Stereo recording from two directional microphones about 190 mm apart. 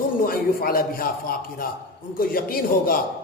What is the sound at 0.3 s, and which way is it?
A man's voice, 50° left (ahead or behind).